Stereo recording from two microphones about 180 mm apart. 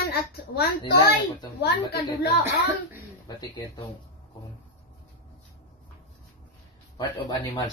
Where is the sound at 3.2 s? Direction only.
20° left (ahead or behind).